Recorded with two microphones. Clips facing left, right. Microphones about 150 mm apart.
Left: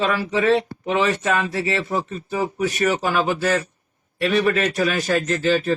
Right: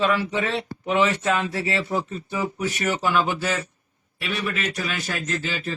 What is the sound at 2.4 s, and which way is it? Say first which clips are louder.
Speech: left 4 dB; 45° left (ahead or behind).